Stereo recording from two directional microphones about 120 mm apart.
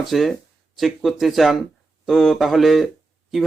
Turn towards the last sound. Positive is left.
turn(degrees=0)  # may be behind; listen again after turning